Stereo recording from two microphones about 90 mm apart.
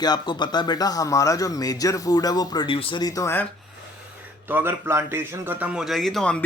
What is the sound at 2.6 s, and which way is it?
Speech, 75° left (ahead or behind).